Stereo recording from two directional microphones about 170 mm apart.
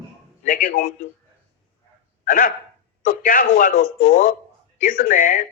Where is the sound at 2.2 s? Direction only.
55° left (ahead or behind).